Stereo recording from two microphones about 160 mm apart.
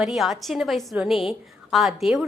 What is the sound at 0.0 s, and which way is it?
A woman's voice, centre (ahead or behind).